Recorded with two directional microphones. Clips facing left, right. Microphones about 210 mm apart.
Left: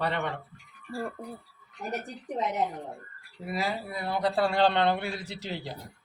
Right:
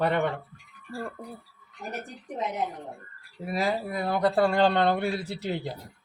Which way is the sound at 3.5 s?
50° right (ahead or behind).